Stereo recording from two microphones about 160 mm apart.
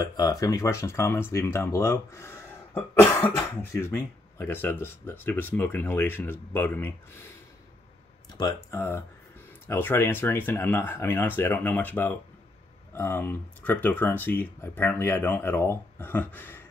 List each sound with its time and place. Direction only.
0.0 s speech: 20° left (ahead or behind)
8.4 s speech: 20° left (ahead or behind)